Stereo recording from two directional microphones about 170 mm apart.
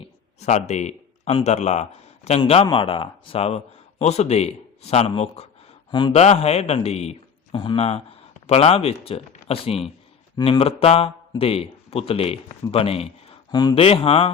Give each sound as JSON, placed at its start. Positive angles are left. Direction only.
{"t": 0.0, "sound": "speech", "side_deg": 40}
{"t": 7.5, "sound": "speech", "side_deg": 25}